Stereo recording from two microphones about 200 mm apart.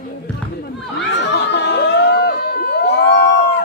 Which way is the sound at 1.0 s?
60° left (ahead or behind).